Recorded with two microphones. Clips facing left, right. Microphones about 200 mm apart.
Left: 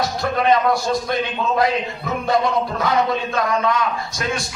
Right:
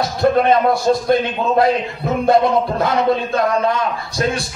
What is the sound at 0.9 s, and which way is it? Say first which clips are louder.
Speech: right 6 dB; 40° right (ahead or behind).